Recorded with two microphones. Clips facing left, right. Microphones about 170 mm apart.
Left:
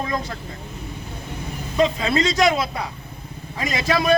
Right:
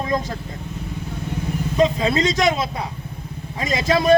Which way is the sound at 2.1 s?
20° right (ahead or behind).